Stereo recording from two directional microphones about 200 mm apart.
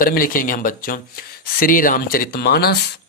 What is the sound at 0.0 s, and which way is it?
Speech, 45° left (ahead or behind).